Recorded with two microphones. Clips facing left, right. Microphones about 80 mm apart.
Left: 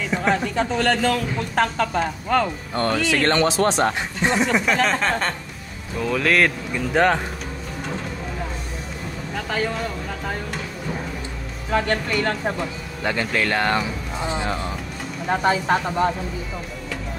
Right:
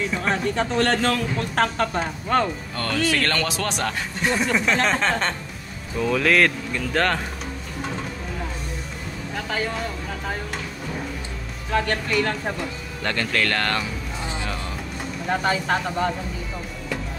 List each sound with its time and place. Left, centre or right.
0.3 s speech: centre
2.7 s speech: left; by 6.5 s centre
6.7 s speech: centre
9.3 s speech: centre
11.7 s speech: centre; by 14.6 s left
15.2 s speech: centre
15.5 s speech: left